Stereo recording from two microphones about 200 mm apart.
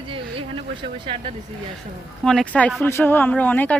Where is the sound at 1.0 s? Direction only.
25° right (ahead or behind).